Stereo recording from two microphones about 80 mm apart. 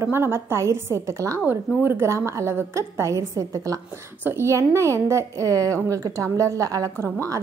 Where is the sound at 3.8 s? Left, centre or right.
Right.